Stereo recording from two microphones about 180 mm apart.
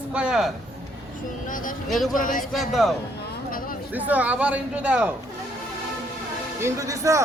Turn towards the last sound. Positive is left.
turn(degrees=-15)  # may be behind; listen again after turning